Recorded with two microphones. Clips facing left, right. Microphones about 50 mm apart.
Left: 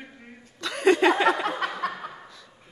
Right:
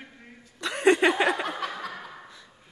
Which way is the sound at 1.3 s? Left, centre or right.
Left.